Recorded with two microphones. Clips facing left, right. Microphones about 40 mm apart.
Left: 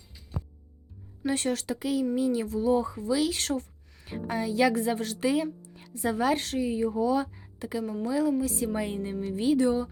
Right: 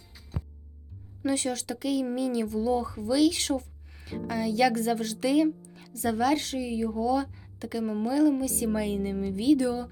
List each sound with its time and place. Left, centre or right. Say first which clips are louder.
1.2 s speech: even; centre
4.0 s a woman's voice: right 1 dB; left